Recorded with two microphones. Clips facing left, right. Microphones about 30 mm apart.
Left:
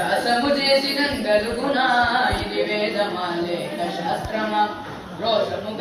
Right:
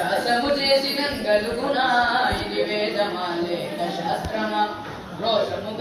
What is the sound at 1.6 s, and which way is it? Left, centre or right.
Carnatic music, centre.